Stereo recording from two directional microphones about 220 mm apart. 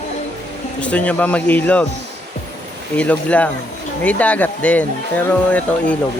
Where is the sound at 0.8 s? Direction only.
5° left (ahead or behind).